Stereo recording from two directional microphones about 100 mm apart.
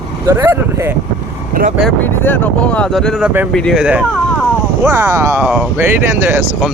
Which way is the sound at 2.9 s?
Centre (ahead or behind).